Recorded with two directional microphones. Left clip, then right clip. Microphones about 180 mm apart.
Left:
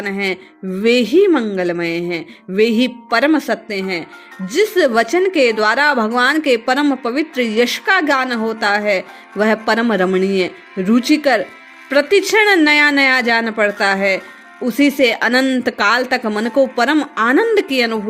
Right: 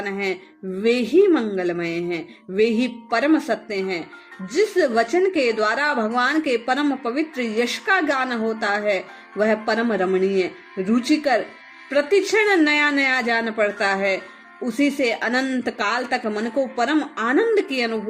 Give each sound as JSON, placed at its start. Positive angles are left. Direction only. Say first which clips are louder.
{"t": 0.0, "sound": "speech", "louder": "left 5 dB", "side_deg": 45}